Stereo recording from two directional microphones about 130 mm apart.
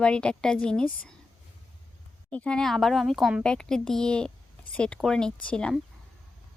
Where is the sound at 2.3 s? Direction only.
10° left (ahead or behind).